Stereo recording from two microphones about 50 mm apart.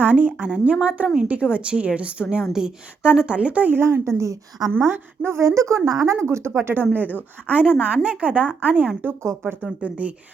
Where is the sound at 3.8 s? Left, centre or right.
Right.